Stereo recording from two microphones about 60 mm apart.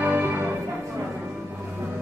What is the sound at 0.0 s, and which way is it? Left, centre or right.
Music, right.